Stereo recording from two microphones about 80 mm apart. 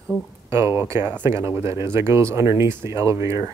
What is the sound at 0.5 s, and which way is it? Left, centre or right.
Speech, right.